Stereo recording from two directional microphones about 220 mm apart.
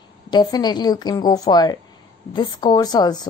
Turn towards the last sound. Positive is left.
turn(degrees=20)  # may be behind; listen again after turning